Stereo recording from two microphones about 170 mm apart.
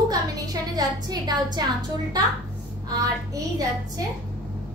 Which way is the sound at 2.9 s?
20° right (ahead or behind).